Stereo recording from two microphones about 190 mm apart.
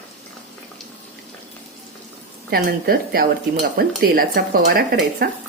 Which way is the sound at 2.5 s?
50° right (ahead or behind).